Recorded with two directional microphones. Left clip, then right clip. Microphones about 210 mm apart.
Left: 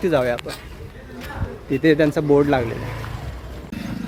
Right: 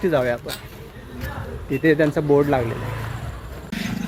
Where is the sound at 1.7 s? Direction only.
10° left (ahead or behind).